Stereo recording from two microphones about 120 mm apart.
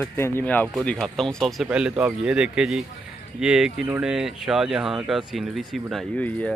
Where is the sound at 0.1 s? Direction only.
20° left (ahead or behind).